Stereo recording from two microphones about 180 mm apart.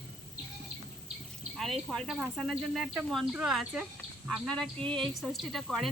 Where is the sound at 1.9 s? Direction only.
Centre (ahead or behind).